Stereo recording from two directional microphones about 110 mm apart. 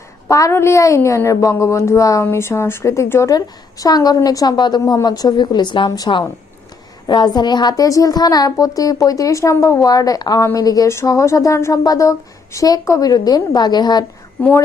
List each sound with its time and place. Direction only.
0.3 s a woman's voice: 30° left (ahead or behind)